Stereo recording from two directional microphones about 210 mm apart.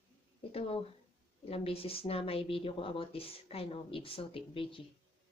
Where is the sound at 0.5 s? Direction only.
25° left (ahead or behind).